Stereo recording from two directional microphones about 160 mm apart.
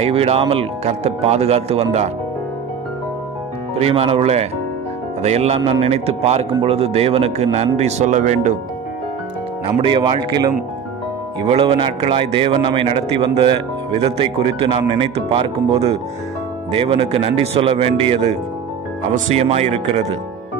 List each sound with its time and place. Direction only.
0.0 s a man's voice: 40° right (ahead or behind)
3.7 s a man's voice: 40° right (ahead or behind)
9.8 s a man's voice: 30° right (ahead or behind)
19.1 s speech: 50° right (ahead or behind)
19.4 s a man's voice: 40° right (ahead or behind)